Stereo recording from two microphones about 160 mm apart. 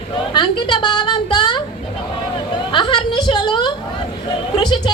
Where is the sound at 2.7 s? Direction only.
30° left (ahead or behind).